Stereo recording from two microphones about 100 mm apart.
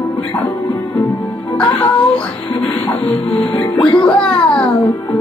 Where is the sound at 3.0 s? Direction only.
65° left (ahead or behind).